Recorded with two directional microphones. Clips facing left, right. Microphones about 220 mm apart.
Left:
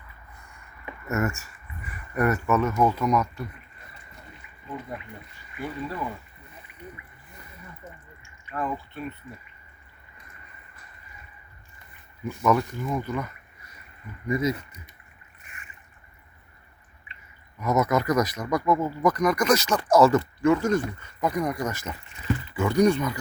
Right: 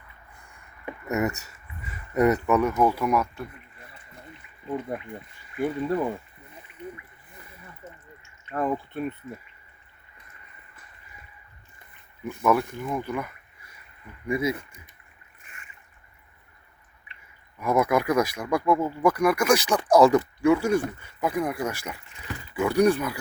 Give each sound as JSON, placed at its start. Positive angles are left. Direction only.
{"t": 1.0, "sound": "speech", "side_deg": -15}
{"t": 5.5, "sound": "speech", "side_deg": -50}
{"t": 8.5, "sound": "speech", "side_deg": -50}
{"t": 12.4, "sound": "speech", "side_deg": -5}
{"t": 17.6, "sound": "speech", "side_deg": -10}